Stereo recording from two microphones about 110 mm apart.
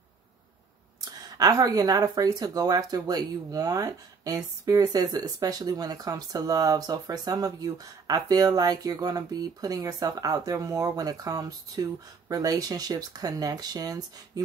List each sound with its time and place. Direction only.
1.1 s speech: 35° right (ahead or behind)